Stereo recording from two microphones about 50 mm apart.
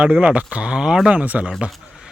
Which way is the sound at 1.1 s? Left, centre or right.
Right.